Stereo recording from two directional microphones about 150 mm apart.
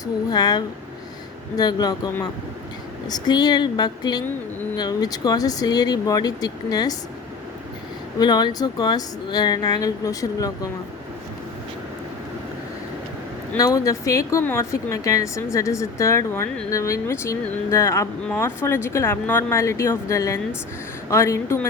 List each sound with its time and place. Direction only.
0.0 s speech: 25° left (ahead or behind)
3.1 s speech: 25° left (ahead or behind)
8.2 s speech: 30° left (ahead or behind)
13.6 s speech: 20° left (ahead or behind)